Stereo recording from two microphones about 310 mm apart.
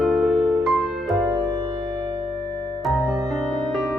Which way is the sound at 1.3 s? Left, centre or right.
Centre.